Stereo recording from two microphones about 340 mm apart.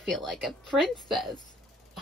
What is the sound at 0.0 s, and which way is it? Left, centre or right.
Speech, centre.